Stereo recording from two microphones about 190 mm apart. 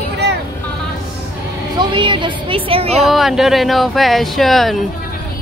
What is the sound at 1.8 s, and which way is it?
A woman's voice, 25° right (ahead or behind).